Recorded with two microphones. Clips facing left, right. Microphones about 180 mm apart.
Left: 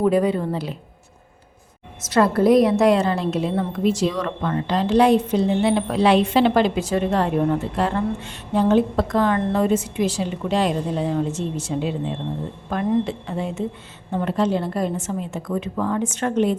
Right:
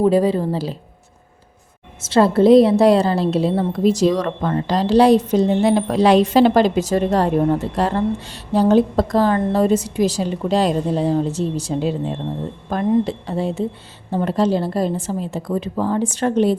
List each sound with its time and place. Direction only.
0.0 s a woman's voice: 30° right (ahead or behind)
2.0 s a woman's voice: 30° right (ahead or behind)